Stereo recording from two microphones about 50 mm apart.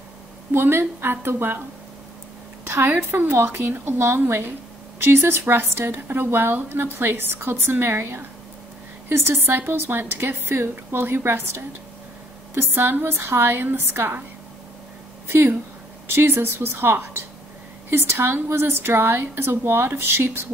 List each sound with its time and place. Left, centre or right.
0.5 s a woman's voice: right
3.2 s a woman's voice: right
12.5 s a woman's voice: right
15.2 s a woman's voice: right